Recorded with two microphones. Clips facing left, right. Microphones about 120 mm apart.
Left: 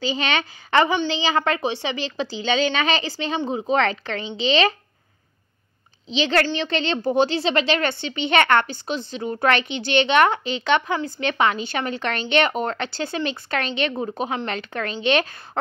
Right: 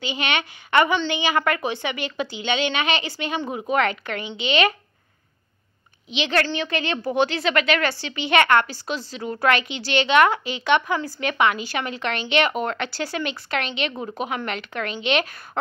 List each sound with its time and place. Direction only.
0.0 s a woman's voice: 35° left (ahead or behind)
6.0 s a woman's voice: 35° left (ahead or behind)
8.6 s a woman's voice: 25° left (ahead or behind)